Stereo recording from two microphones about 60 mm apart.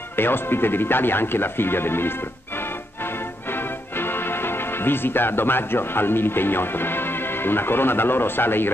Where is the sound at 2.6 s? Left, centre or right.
Left.